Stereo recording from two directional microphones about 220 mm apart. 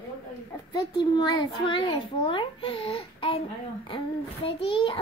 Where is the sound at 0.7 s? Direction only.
20° left (ahead or behind).